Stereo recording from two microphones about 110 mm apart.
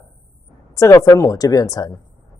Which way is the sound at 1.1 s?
30° left (ahead or behind).